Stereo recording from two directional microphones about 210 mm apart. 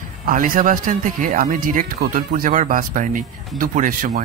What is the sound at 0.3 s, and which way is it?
Speech, 40° right (ahead or behind).